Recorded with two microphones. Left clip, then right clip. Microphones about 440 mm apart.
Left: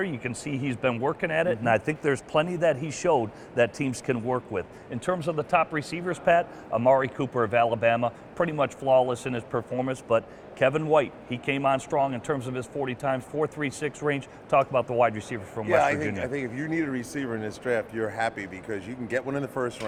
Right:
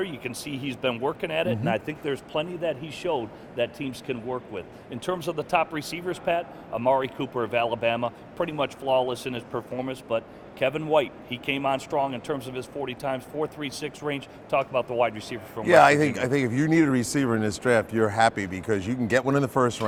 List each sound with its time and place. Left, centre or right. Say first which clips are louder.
0.0 s speech: left 1 dB; left
5.1 s a man's voice: even; left
15.6 s speech: right 6 dB; right